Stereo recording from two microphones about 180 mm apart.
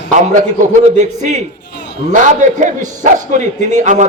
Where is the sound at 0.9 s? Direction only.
40° right (ahead or behind).